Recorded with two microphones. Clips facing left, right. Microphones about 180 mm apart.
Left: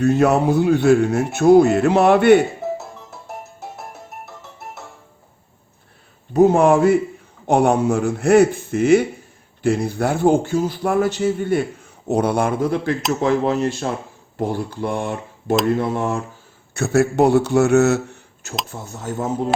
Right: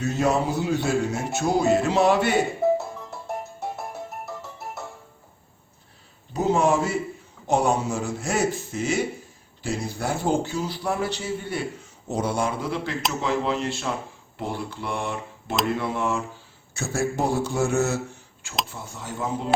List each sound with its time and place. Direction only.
0.0 s speech: 60° left (ahead or behind)
2.7 s music: centre (ahead or behind)
6.3 s a man's voice: 55° left (ahead or behind)
12.0 s a man's voice: 60° left (ahead or behind); by 16.2 s 45° left (ahead or behind)
16.7 s speech: 65° left (ahead or behind)
18.7 s a man's voice: 45° left (ahead or behind)